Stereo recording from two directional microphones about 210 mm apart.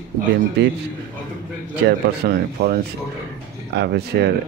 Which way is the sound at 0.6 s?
55° right (ahead or behind).